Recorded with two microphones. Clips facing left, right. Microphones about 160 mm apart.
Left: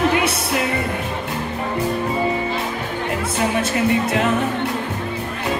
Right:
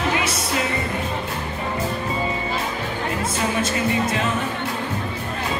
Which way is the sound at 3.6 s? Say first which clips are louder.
Left 2 dB; 60° left (ahead or behind).